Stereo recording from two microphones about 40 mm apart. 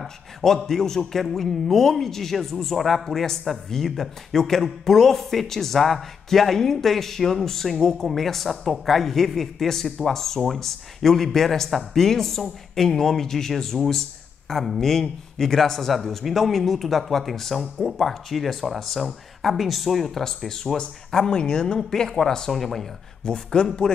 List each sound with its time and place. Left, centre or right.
0.7 s speech: centre
20.2 s speech: centre